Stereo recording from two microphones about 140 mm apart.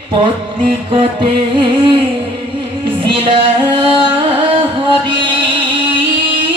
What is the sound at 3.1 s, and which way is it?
Singing, 40° right (ahead or behind).